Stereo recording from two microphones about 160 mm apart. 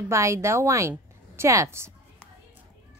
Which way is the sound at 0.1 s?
20° right (ahead or behind).